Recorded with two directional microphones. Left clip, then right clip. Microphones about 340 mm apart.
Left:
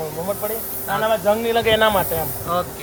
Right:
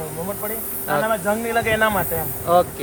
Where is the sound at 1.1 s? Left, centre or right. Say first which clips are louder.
Left 3 dB; left.